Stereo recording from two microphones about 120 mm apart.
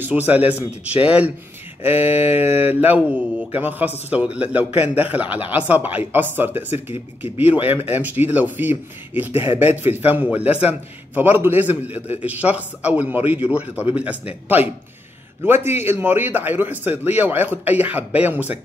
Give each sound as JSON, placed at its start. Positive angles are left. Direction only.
{"t": 0.0, "sound": "speech", "side_deg": -15}
{"t": 4.6, "sound": "a man's voice", "side_deg": 60}
{"t": 4.9, "sound": "speech", "side_deg": -15}